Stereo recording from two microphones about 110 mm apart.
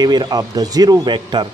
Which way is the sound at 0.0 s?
40° right (ahead or behind).